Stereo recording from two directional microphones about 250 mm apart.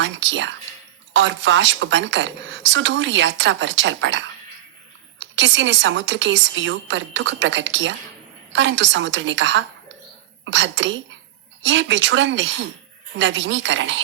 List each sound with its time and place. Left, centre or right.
0.0 s a woman's voice: right